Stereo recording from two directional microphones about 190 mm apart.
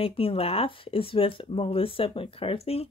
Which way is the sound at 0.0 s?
30° left (ahead or behind).